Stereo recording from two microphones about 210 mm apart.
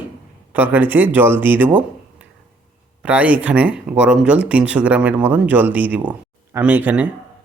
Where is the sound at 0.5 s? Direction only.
10° right (ahead or behind).